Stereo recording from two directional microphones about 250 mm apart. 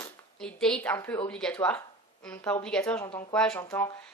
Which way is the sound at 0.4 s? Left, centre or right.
Centre.